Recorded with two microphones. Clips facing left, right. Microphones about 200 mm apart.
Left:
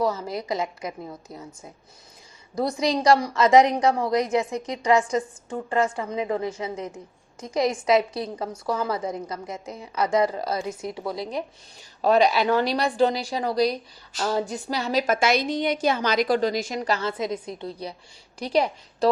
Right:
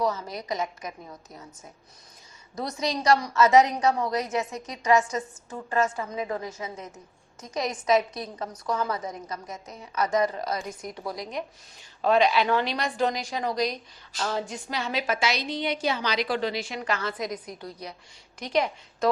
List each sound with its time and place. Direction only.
0.0 s a woman's voice: 30° left (ahead or behind)
2.6 s a woman's voice: 30° left (ahead or behind)